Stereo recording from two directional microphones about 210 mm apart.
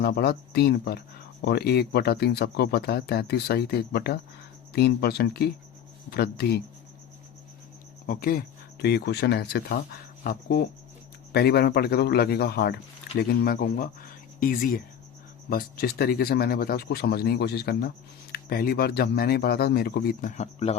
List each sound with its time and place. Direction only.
0.0 s speech: 50° left (ahead or behind)
8.0 s speech: 40° left (ahead or behind)